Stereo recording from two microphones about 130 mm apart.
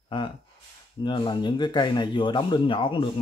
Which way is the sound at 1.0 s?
35° left (ahead or behind).